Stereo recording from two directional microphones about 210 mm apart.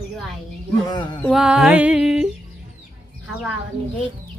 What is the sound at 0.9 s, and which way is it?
Speech, 20° left (ahead or behind).